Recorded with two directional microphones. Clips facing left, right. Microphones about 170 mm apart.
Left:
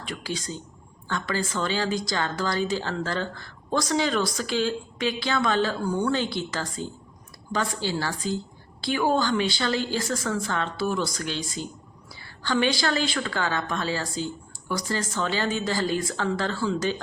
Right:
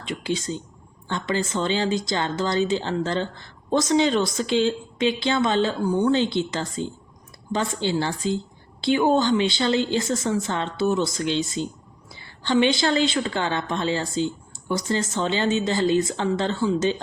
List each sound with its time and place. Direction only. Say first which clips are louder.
0.0 s speech: right 5 dB; 25° right (ahead or behind)